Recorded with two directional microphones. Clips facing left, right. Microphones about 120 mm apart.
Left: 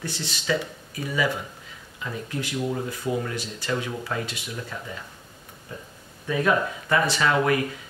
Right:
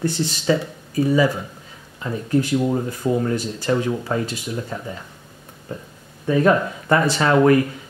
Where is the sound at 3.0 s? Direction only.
45° right (ahead or behind).